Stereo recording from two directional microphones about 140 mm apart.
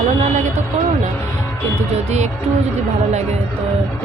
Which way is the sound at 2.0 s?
55° right (ahead or behind).